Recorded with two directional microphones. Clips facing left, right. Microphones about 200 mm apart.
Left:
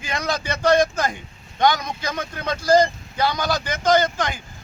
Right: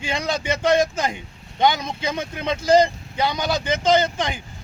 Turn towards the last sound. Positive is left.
turn(degrees=-25)  # may be behind; listen again after turning